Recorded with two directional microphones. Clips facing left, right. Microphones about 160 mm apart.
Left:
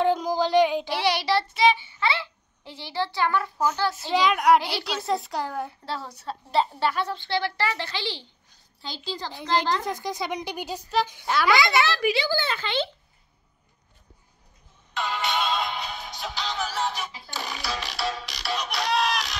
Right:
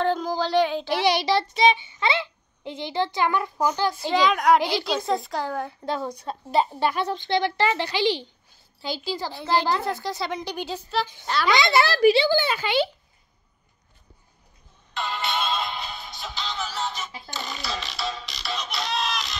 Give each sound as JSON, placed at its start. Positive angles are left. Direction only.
{"t": 0.0, "sound": "child singing", "side_deg": 10}
{"t": 1.0, "sound": "a child's voice", "side_deg": -15}
{"t": 4.1, "sound": "speech", "side_deg": 10}
{"t": 5.9, "sound": "a child's voice", "side_deg": -15}
{"t": 10.0, "sound": "speech", "side_deg": 15}
{"t": 11.4, "sound": "a child's voice", "side_deg": -20}
{"t": 11.7, "sound": "a child's voice", "side_deg": -35}
{"t": 12.4, "sound": "a child's voice", "side_deg": -10}
{"t": 15.0, "sound": "music", "side_deg": 15}